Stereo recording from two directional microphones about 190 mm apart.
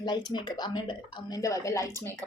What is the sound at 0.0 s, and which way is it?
Speech, 20° left (ahead or behind).